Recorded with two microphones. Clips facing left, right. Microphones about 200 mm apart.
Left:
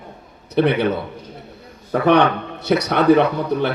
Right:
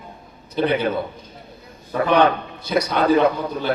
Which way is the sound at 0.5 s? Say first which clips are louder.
Left 3 dB; 70° left (ahead or behind).